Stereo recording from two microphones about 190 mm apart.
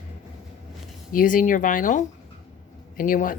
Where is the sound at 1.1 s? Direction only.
45° left (ahead or behind).